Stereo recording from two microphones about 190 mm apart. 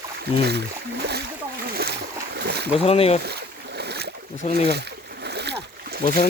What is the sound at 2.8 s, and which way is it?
Speech, 30° left (ahead or behind).